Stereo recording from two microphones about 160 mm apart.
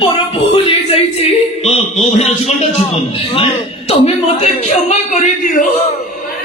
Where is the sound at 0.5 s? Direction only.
35° left (ahead or behind).